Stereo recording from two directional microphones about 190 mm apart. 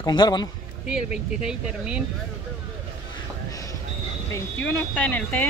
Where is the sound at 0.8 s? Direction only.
5° right (ahead or behind).